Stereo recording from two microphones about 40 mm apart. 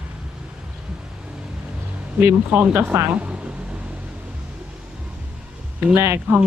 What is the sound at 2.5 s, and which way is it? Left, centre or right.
Speech, right.